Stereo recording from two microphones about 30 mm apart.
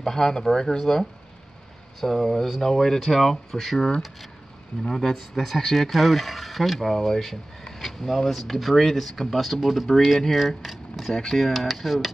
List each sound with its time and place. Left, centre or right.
0.0 s speech: centre
5.3 s speech: centre
11.1 s speech: centre
11.5 s speech: centre